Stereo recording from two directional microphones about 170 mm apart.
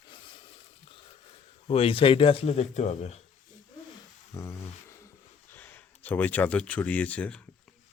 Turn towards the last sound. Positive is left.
turn(degrees=5)  # may be behind; listen again after turning